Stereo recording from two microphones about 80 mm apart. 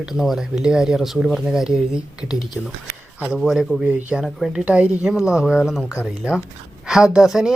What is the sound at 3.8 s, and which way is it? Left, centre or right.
Speech, centre.